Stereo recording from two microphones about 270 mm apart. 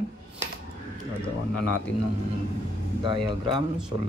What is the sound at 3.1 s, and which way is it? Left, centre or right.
Speech, centre.